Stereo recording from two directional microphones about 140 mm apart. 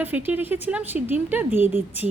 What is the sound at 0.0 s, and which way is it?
A woman's voice, 15° right (ahead or behind).